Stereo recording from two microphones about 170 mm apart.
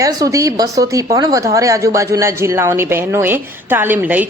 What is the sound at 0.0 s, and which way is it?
A woman's voice, 20° right (ahead or behind).